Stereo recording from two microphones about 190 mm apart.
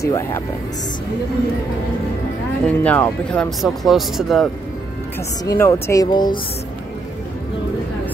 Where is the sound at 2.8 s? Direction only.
5° left (ahead or behind).